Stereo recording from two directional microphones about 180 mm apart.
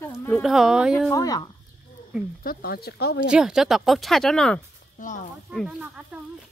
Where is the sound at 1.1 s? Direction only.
20° left (ahead or behind).